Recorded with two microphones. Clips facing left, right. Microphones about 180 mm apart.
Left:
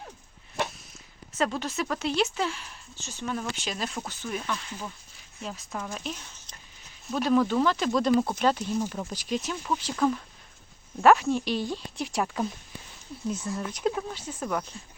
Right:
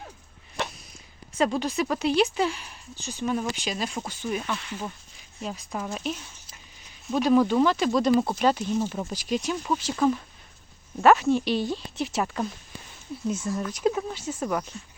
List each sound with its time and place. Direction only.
1.3 s speech: 10° right (ahead or behind)
7.1 s speech: 10° right (ahead or behind)